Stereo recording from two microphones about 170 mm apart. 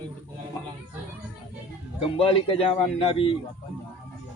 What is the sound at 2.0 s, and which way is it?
A man's voice, 35° left (ahead or behind).